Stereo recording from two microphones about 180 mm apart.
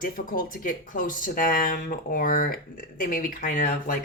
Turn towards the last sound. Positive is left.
turn(degrees=50)  # may be behind; listen again after turning